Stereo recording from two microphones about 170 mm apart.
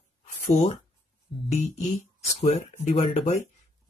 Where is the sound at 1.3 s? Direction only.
30° left (ahead or behind).